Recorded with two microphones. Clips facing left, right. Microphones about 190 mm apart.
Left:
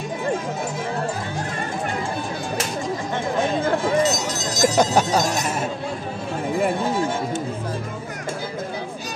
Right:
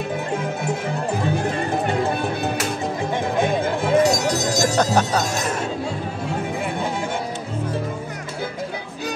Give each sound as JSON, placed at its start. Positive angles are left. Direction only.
{"t": 3.8, "sound": "music", "side_deg": -60}
{"t": 4.6, "sound": "speech", "side_deg": 10}